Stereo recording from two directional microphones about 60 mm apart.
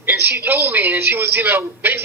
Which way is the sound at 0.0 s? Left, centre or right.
Right.